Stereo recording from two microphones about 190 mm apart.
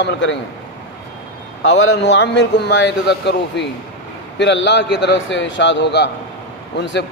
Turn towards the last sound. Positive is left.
turn(degrees=65)  # may be behind; listen again after turning